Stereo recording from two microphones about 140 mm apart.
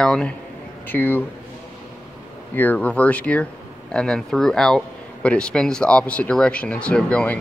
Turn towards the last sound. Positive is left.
turn(degrees=10)  # may be behind; listen again after turning